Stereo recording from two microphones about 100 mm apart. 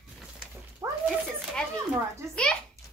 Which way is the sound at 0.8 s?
35° right (ahead or behind).